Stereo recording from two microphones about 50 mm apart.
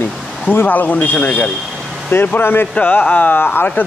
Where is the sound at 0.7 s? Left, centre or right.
Left.